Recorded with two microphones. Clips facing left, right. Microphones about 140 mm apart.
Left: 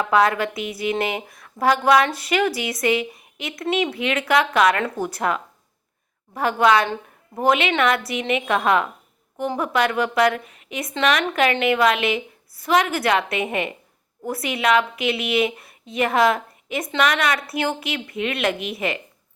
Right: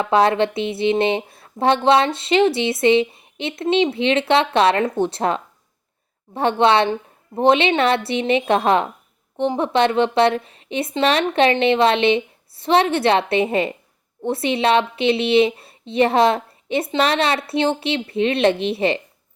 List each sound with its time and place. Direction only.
0.0 s a woman's voice: 30° right (ahead or behind)